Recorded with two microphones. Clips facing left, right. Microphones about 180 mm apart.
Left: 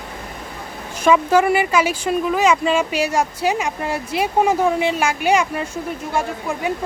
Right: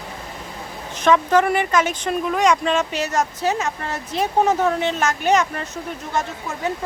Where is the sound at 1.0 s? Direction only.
10° left (ahead or behind).